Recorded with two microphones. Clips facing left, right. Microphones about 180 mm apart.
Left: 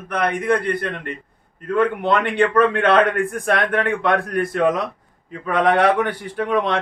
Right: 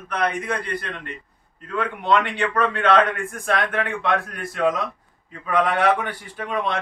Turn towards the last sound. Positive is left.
turn(degrees=70)  # may be behind; listen again after turning